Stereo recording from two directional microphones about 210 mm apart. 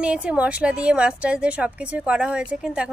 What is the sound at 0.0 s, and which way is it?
A woman's voice, 5° right (ahead or behind).